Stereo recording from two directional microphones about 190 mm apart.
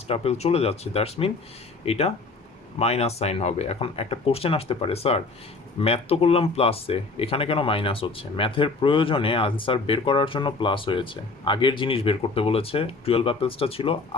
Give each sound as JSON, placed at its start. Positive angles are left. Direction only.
{"t": 0.1, "sound": "speech", "side_deg": 35}